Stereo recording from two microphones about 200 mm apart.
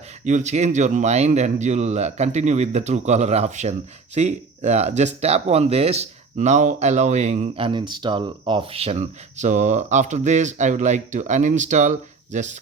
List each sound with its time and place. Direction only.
0.3 s speech: 35° right (ahead or behind)